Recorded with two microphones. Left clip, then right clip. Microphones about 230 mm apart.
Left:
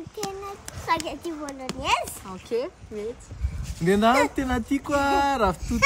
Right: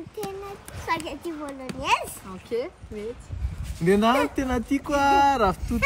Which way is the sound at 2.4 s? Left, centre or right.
Left.